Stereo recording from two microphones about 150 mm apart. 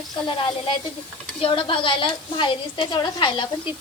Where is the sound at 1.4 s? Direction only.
35° left (ahead or behind).